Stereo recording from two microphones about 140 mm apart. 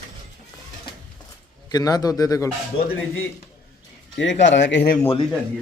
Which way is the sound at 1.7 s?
25° left (ahead or behind).